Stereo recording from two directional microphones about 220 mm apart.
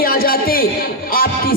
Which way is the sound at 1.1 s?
40° left (ahead or behind).